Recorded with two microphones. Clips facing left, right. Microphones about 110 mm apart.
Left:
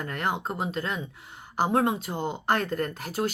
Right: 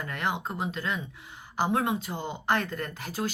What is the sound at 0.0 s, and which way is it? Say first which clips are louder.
Speech: left 2 dB; 40° left (ahead or behind).